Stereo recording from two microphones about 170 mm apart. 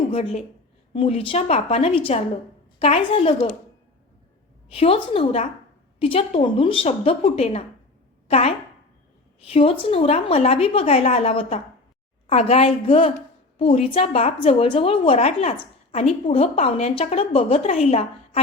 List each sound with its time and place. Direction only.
0.1 s a woman's voice: 40° left (ahead or behind)
4.7 s a woman's voice: 35° left (ahead or behind)